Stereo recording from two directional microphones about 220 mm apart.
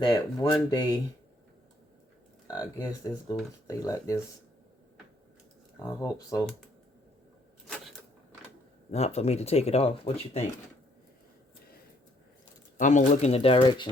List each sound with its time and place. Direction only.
0.0 s speech: 15° left (ahead or behind)
2.5 s speech: 15° left (ahead or behind)
5.8 s speech: 15° left (ahead or behind)
8.9 s speech: 30° left (ahead or behind)
12.8 s speech: 35° left (ahead or behind)